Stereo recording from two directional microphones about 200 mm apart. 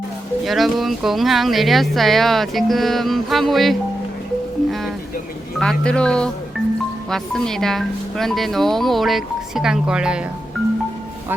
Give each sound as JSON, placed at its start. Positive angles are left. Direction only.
{"t": 0.4, "sound": "speech", "side_deg": 0}
{"t": 5.5, "sound": "speech", "side_deg": 5}